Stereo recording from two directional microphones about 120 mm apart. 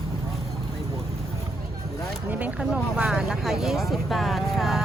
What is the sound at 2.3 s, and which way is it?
Speech, 10° right (ahead or behind).